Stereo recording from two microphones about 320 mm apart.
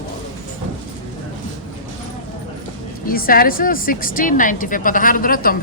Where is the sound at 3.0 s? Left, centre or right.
Left.